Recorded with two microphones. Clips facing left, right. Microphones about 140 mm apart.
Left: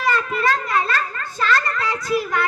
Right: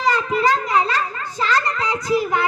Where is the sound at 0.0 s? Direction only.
20° right (ahead or behind).